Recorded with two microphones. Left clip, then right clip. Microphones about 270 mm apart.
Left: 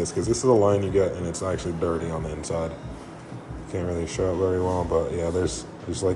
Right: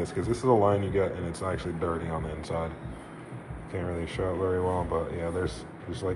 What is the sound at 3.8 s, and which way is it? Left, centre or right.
Speech, centre.